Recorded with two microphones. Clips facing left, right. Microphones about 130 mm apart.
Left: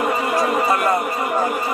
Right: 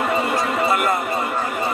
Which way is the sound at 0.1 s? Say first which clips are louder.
Left 1 dB; 25° right (ahead or behind).